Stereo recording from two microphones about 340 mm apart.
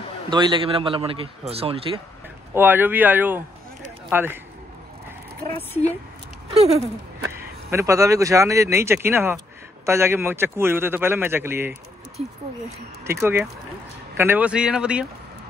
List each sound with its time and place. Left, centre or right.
0.3 s speech: centre
2.5 s speech: centre
6.5 s speech: centre
12.7 s speech: centre